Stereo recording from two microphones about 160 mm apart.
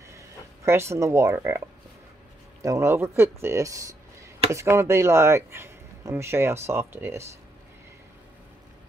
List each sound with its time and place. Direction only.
0.7 s speech: 15° right (ahead or behind)
2.6 s speech: 15° right (ahead or behind)